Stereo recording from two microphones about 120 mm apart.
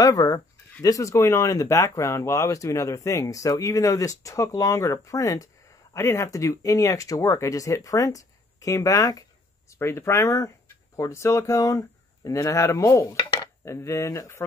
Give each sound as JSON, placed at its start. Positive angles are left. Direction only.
{"t": 0.0, "sound": "speech", "side_deg": 30}
{"t": 12.3, "sound": "cutlery", "side_deg": 25}